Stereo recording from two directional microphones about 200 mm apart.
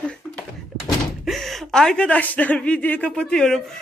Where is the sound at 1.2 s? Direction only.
Centre (ahead or behind).